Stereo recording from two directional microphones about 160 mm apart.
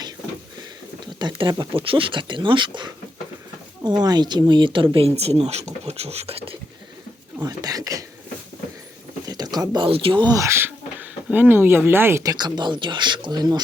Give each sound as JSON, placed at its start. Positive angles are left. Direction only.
{"t": 1.2, "sound": "speech", "side_deg": -30}
{"t": 7.3, "sound": "speech", "side_deg": -20}
{"t": 9.2, "sound": "speech", "side_deg": -25}